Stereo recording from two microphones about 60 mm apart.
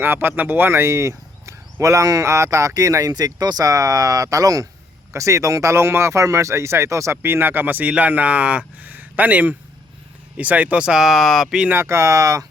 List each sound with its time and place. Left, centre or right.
0.0 s speech: right
0.8 s speech: right
5.1 s speech: right
7.2 s speech: right; by 11.6 s centre
11.7 s speech: right